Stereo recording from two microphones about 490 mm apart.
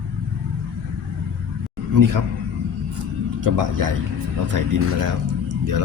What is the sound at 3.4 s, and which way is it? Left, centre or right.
A man's voice, right.